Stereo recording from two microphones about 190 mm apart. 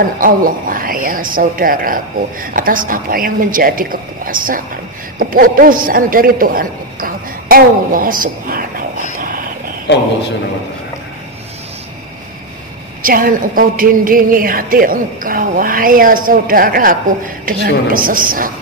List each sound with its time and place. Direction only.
0.2 s a woman's voice: 45° right (ahead or behind)
9.2 s a sound: 45° right (ahead or behind)
13.0 s a woman's voice: 45° right (ahead or behind)